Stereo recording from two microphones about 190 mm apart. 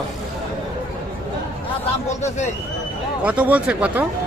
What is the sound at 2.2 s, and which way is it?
Speech, 40° left (ahead or behind).